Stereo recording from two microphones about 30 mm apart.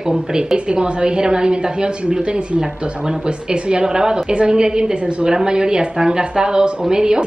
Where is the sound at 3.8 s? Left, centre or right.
Right.